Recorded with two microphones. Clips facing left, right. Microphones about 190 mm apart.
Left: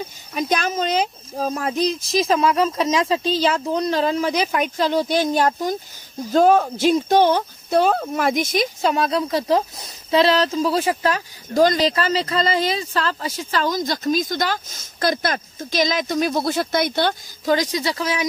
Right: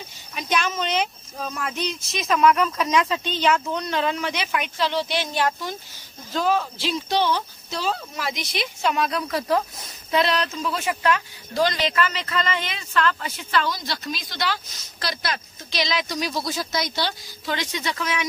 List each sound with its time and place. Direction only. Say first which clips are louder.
0.3 s speech: left 3 dB; 40° left (ahead or behind)